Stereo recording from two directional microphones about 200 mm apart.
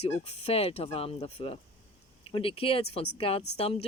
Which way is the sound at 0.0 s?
30° left (ahead or behind).